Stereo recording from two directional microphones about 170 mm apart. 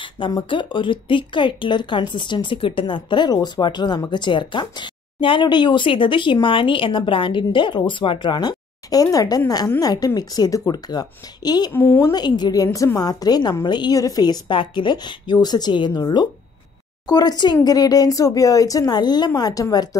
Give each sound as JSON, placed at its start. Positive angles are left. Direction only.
{"t": 0.0, "sound": "speech", "side_deg": 25}